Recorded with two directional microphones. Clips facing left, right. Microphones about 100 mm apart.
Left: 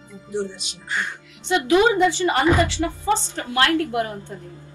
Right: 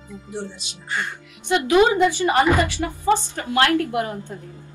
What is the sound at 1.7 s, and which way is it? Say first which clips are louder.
A woman's voice: even; 20° right (ahead or behind).